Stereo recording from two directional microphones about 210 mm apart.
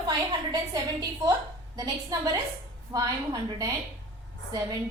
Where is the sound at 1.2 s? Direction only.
20° right (ahead or behind).